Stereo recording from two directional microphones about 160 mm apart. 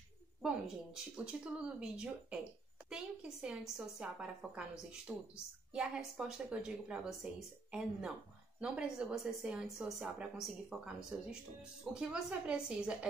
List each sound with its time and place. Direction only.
0.4 s a woman's voice: 5° right (ahead or behind)
8.5 s a woman's voice: 5° right (ahead or behind)